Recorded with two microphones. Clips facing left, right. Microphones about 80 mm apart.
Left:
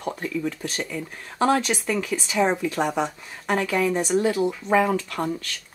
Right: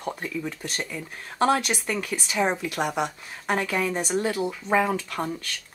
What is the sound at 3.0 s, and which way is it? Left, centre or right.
Speech, centre.